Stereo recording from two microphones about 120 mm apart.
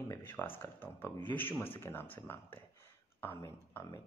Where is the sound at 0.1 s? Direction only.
15° left (ahead or behind).